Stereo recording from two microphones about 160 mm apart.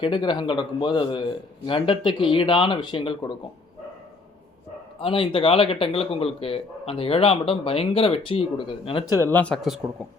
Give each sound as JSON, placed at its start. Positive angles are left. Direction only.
{"t": 0.0, "sound": "a man's voice", "side_deg": 30}
{"t": 4.9, "sound": "a man's voice", "side_deg": 35}
{"t": 9.3, "sound": "speech", "side_deg": 5}